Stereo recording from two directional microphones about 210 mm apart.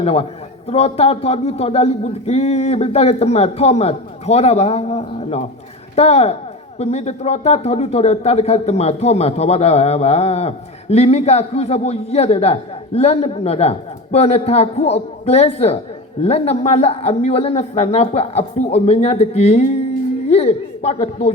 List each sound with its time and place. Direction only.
0.0 s a man's voice: 30° left (ahead or behind)